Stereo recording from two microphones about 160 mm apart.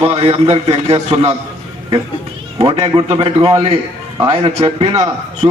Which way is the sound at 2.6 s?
40° right (ahead or behind).